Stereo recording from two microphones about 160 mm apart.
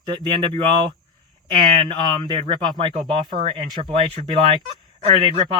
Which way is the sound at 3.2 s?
50° right (ahead or behind).